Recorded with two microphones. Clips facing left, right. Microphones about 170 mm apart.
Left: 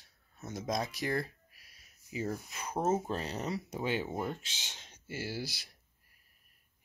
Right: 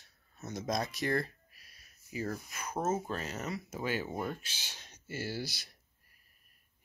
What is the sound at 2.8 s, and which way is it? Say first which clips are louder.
Speech: left 2 dB; 15° left (ahead or behind).